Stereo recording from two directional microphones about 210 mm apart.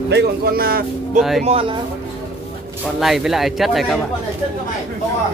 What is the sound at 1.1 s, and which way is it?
Speech, centre (ahead or behind).